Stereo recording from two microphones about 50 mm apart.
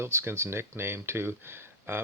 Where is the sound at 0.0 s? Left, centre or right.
Right.